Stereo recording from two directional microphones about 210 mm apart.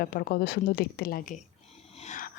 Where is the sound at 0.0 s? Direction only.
45° left (ahead or behind).